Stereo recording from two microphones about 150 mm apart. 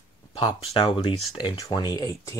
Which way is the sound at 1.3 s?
25° left (ahead or behind).